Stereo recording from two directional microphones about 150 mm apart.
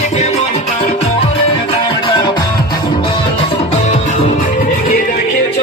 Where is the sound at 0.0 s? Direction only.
50° left (ahead or behind); by 5.2 s 70° left (ahead or behind).